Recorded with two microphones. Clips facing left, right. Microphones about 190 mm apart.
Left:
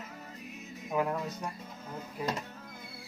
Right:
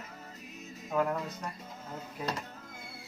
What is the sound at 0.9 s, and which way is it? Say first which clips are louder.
Speech: right 1 dB; 10° left (ahead or behind).